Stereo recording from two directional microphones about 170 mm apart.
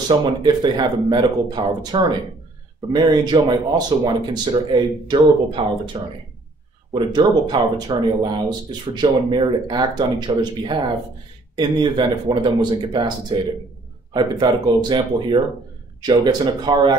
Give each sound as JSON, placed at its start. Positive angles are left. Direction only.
{"t": 0.2, "sound": "speech", "side_deg": -25}